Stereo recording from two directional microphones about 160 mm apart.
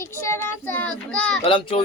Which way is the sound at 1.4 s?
35° left (ahead or behind).